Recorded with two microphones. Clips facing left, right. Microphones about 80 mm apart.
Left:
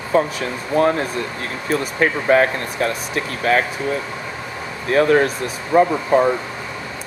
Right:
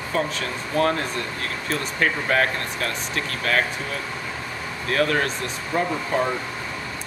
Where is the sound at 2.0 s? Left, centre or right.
Centre.